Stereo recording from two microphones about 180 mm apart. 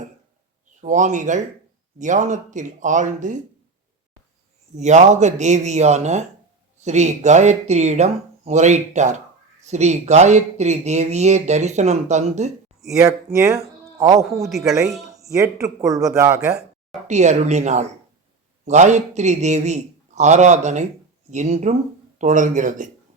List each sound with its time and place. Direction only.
0.8 s speech: 45° right (ahead or behind)
4.7 s speech: 40° right (ahead or behind)
13.0 s speech: 15° right (ahead or behind)
14.5 s speech: centre (ahead or behind)
15.3 s speech: 15° right (ahead or behind)
17.1 s speech: 40° right (ahead or behind)